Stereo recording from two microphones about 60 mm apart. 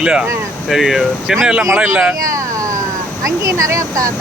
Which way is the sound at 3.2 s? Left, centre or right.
Right.